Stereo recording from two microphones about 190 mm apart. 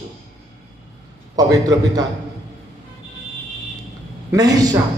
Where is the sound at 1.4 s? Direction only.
20° right (ahead or behind).